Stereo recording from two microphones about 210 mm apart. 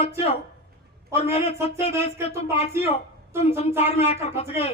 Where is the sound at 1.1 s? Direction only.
30° left (ahead or behind).